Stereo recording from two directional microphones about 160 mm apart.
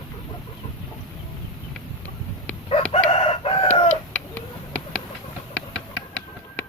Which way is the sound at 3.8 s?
10° left (ahead or behind).